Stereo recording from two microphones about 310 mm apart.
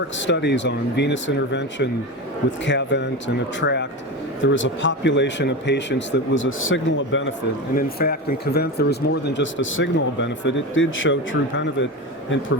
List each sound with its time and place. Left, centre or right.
0.2 s speech: left